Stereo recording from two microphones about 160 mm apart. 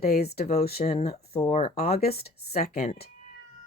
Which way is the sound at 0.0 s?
80° left.